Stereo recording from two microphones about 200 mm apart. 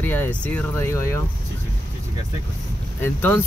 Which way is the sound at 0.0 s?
10° left (ahead or behind).